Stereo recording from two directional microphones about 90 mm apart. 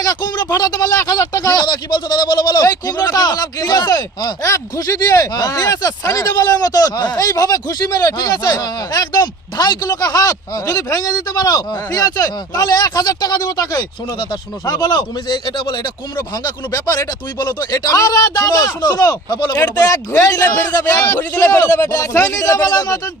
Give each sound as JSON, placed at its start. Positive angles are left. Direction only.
{"t": 0.0, "sound": "a sound", "side_deg": 50}
{"t": 0.5, "sound": "speech", "side_deg": 40}
{"t": 4.4, "sound": "speech", "side_deg": 35}
{"t": 17.3, "sound": "speech", "side_deg": 55}
{"t": 21.2, "sound": "a man's voice", "side_deg": 25}
{"t": 21.9, "sound": "speech", "side_deg": 40}